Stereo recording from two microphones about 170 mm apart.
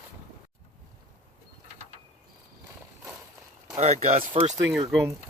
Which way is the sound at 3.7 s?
40° right (ahead or behind).